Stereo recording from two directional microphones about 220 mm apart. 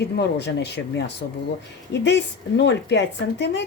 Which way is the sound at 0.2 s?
50° left (ahead or behind).